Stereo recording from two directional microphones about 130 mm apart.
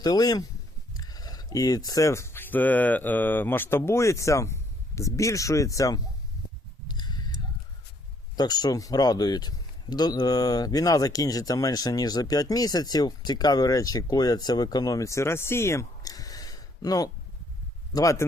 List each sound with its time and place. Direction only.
0.0 s speech: 30° left (ahead or behind)
6.8 s a sound: 30° left (ahead or behind)
8.4 s speech: 30° left (ahead or behind)